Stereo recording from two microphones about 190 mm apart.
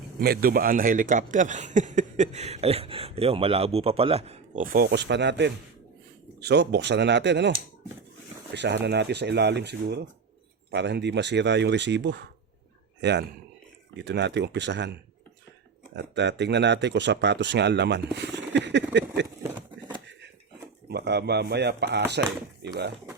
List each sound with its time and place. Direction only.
0.2 s speech: 50° right (ahead or behind); by 4.6 s 35° right (ahead or behind)
4.6 s speech: 50° right (ahead or behind); by 7.5 s 65° right (ahead or behind)
8.5 s a man's voice: 65° right (ahead or behind)
16.0 s speech: 65° right (ahead or behind)
20.9 s speech: 60° right (ahead or behind)